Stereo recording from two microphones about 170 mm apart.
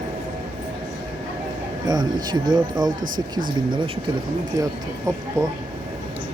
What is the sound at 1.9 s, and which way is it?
A man's voice, 25° right (ahead or behind).